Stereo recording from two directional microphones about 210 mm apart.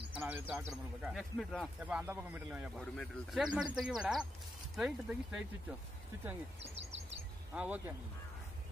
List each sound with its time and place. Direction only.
0.1 s speech: 10° right (ahead or behind)
1.1 s speech: centre (ahead or behind)
6.6 s speech: 30° right (ahead or behind)
7.5 s speech: 5° right (ahead or behind)